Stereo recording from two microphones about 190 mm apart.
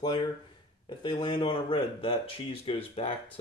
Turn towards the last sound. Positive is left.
turn(degrees=30)  # may be behind; listen again after turning